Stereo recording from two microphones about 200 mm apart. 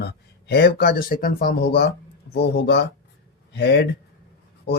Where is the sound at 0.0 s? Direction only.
55° left (ahead or behind).